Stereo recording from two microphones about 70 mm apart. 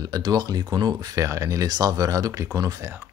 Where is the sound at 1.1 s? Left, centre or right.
Right.